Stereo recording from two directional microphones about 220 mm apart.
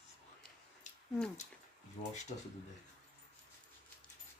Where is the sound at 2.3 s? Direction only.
35° left (ahead or behind).